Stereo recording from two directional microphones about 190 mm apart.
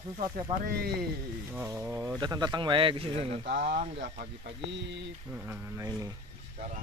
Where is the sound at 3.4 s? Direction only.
60° right (ahead or behind).